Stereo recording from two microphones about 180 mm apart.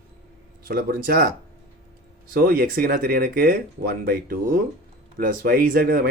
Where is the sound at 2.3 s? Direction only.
55° right (ahead or behind).